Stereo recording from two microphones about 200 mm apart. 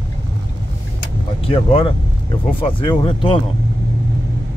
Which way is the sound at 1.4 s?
30° left (ahead or behind).